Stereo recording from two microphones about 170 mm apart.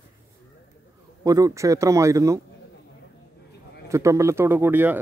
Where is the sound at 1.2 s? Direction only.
20° right (ahead or behind).